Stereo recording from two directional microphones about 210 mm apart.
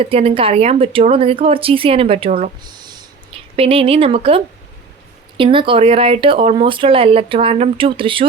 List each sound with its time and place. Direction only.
0.0 s speech: 25° right (ahead or behind)
2.6 s a sound: 20° right (ahead or behind)
3.5 s speech: 25° right (ahead or behind)